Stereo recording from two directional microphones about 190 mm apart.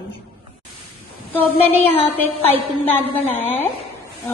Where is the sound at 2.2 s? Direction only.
10° left (ahead or behind).